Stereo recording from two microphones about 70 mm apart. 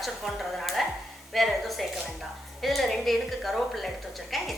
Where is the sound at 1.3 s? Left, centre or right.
Centre.